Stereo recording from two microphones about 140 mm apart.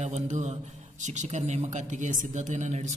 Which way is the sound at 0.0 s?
55° right (ahead or behind).